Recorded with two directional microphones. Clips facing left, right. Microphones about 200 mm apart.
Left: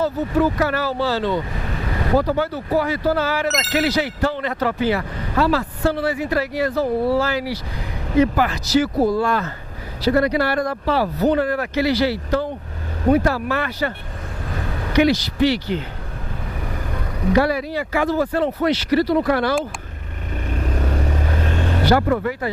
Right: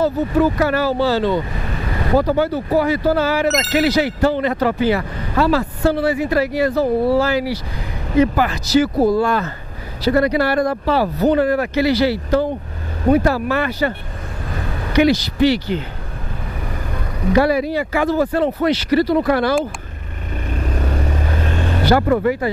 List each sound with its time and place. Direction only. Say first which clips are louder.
0.0 s speech: right 3 dB; 15° right (ahead or behind); by 3.7 s centre (ahead or behind)
3.9 s speech: right 5 dB; 10° right (ahead or behind)
8.9 s speech: right 3 dB; 30° right (ahead or behind)
9.2 s speech: right 2 dB; 10° right (ahead or behind)
14.5 s vehicle: right 1 dB; 20° right (ahead or behind)
17.3 s speech: right 3 dB; 10° right (ahead or behind)
20.8 s vehicle: right 1 dB; 20° right (ahead or behind)